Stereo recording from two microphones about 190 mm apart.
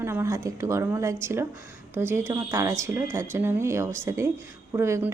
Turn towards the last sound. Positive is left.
turn(degrees=-15)  # may be behind; listen again after turning